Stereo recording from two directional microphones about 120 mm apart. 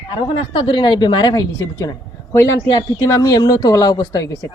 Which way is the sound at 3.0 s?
30° left (ahead or behind).